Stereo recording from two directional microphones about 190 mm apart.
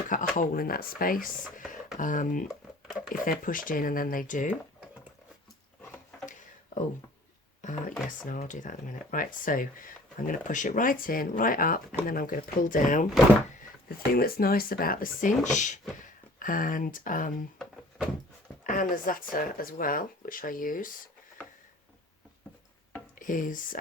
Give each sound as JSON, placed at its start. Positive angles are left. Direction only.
{"t": 0.1, "sound": "speech", "side_deg": 45}
{"t": 2.5, "sound": "a sound", "side_deg": -5}
{"t": 3.1, "sound": "speech", "side_deg": 45}
{"t": 5.8, "sound": "a sound", "side_deg": 10}
{"t": 7.6, "sound": "speech", "side_deg": 40}
{"t": 18.6, "sound": "speech", "side_deg": 45}
{"t": 23.1, "sound": "speech", "side_deg": 45}